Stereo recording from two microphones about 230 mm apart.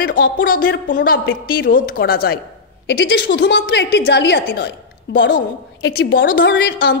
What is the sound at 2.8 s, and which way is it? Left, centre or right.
A woman's voice, left.